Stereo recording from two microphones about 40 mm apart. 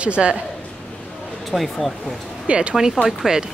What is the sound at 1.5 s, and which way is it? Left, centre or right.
Speech, centre.